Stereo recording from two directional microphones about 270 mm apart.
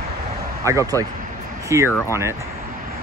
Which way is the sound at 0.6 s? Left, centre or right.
Centre.